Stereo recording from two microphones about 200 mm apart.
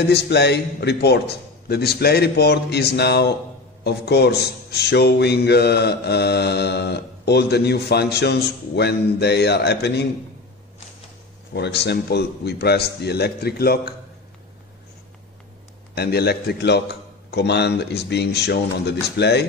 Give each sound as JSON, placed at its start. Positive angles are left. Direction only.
{"t": 0.1, "sound": "a man's voice", "side_deg": 55}
{"t": 11.5, "sound": "a man's voice", "side_deg": 55}
{"t": 15.9, "sound": "a man's voice", "side_deg": 55}